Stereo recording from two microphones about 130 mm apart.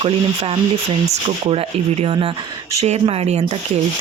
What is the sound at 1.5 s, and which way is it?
Speech, 50° right (ahead or behind).